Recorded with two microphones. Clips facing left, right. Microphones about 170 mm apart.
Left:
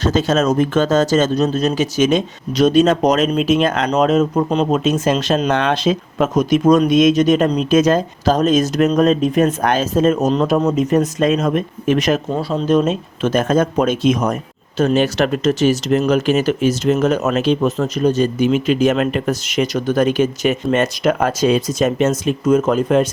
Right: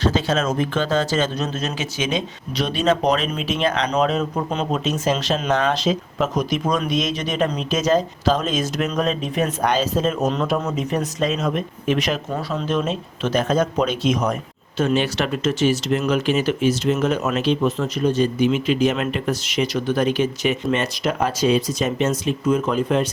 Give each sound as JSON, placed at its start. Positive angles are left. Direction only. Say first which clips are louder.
{"t": 0.0, "sound": "speech", "louder": "left 4 dB", "side_deg": 45}
{"t": 12.4, "sound": "speech", "louder": "left 6 dB", "side_deg": 30}
{"t": 12.6, "sound": "speech", "louder": "left 9 dB", "side_deg": 40}